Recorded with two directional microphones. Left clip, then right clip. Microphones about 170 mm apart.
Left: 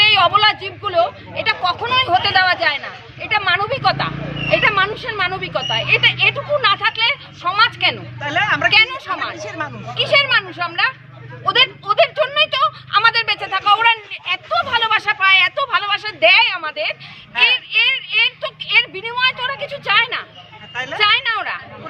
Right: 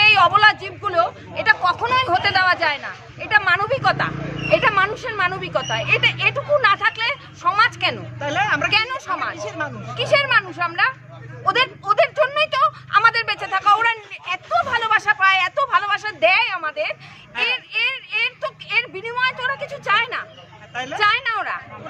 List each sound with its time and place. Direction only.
0.0 s a sound: centre (ahead or behind)
4.5 s speech: centre (ahead or behind)
8.2 s a woman's voice: 60° right (ahead or behind)
8.7 s a woman's voice: centre (ahead or behind)
9.3 s a woman's voice: 60° right (ahead or behind)
10.1 s a woman's voice: centre (ahead or behind)
11.4 s a sound: centre (ahead or behind)
20.7 s a woman's voice: 65° right (ahead or behind)
21.0 s a woman's voice: centre (ahead or behind)